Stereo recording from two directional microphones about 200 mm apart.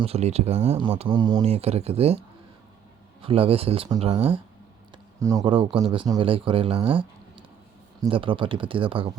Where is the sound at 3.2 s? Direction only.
30° right (ahead or behind).